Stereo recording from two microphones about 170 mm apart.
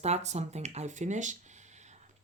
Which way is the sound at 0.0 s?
40° right (ahead or behind).